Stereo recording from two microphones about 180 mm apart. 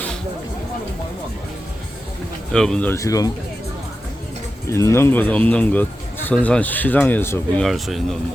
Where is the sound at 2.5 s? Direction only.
5° left (ahead or behind).